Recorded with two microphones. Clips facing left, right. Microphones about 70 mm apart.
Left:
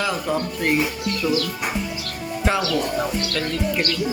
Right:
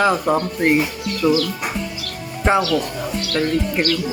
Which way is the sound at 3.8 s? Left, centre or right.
Right.